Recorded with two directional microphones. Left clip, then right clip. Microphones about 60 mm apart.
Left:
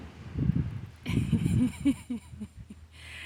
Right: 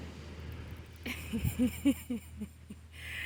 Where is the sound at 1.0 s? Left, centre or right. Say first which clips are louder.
Left 6 dB; left.